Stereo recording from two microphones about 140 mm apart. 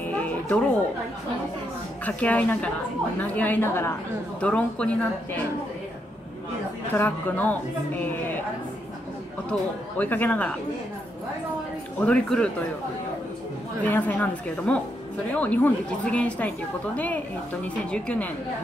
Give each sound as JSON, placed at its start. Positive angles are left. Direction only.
{"t": 0.0, "sound": "a sound", "side_deg": 10}
{"t": 2.0, "sound": "a woman's voice", "side_deg": 10}
{"t": 7.0, "sound": "a woman's voice", "side_deg": 15}
{"t": 9.5, "sound": "a woman's voice", "side_deg": 10}
{"t": 12.0, "sound": "a woman's voice", "side_deg": 5}
{"t": 13.8, "sound": "a woman's voice", "side_deg": 10}